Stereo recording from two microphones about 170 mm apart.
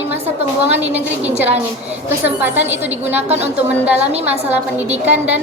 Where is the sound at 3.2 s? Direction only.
40° right (ahead or behind).